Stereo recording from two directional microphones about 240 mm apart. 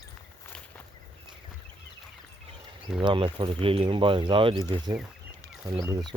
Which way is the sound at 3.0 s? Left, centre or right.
Right.